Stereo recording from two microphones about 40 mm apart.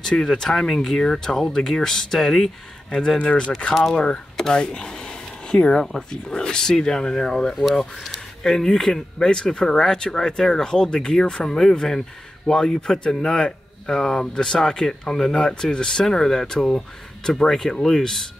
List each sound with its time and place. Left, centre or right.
0.1 s speech: centre
3.2 s speech: left
4.7 s a sound: centre
5.8 s speech: centre
7.5 s speech: centre
8.4 s speech: centre